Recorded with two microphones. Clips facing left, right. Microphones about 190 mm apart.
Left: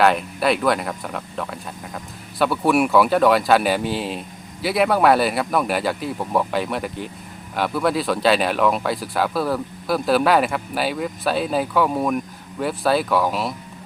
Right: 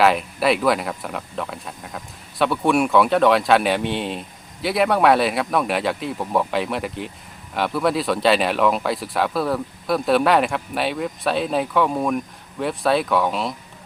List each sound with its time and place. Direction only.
0.0 s speech: centre (ahead or behind)